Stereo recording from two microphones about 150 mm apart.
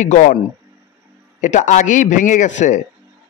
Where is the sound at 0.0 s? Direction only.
55° left (ahead or behind).